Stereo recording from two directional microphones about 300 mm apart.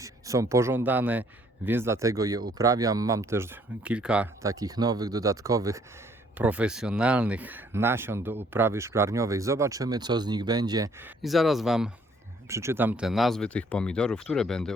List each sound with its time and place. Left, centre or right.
0.0 s speech: centre
11.2 s speech: centre